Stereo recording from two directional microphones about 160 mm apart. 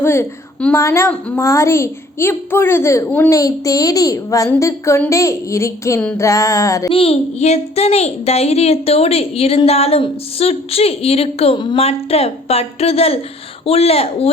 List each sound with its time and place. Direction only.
0.0 s a woman's voice: 15° left (ahead or behind)
6.1 s music: 20° left (ahead or behind)
6.9 s a woman's voice: 35° left (ahead or behind)